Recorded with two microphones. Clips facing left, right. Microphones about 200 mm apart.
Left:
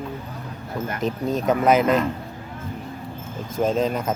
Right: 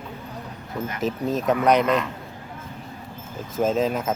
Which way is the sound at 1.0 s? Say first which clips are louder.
Even; centre (ahead or behind).